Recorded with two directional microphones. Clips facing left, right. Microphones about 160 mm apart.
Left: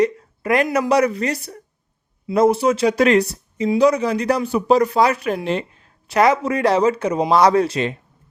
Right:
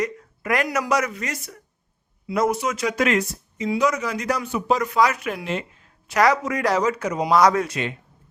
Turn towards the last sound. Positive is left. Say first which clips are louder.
# left 4 dB
turn(degrees=30)  # may be behind; listen again after turning